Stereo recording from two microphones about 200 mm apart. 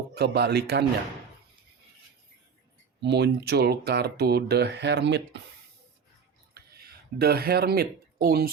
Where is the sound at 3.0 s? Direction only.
55° right (ahead or behind).